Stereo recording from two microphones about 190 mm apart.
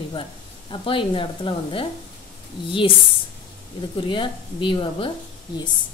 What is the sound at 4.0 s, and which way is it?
Speech, 25° left (ahead or behind).